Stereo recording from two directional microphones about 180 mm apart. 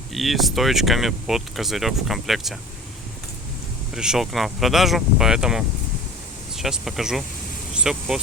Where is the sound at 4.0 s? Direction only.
Centre (ahead or behind).